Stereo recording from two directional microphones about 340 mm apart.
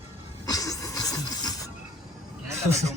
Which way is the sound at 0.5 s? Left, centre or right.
Centre.